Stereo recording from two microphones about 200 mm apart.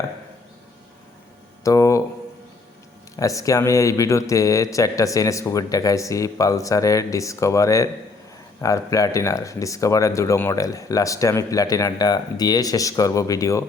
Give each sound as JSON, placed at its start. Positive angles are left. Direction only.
{"t": 1.6, "sound": "speech", "side_deg": 15}
{"t": 3.2, "sound": "speech", "side_deg": 15}